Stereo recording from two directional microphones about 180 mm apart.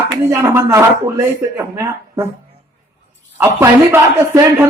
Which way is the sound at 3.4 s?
15° right (ahead or behind).